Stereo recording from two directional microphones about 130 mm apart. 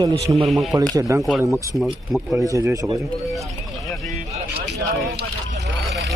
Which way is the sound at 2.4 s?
25° right (ahead or behind).